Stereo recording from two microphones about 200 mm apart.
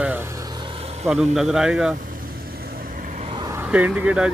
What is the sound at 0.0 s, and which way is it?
Vehicle, 10° right (ahead or behind).